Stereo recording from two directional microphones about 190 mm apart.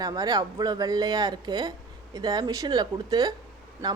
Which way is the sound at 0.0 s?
20° right (ahead or behind).